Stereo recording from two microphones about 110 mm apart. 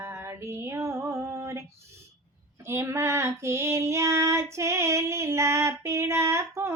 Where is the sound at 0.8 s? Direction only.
25° right (ahead or behind).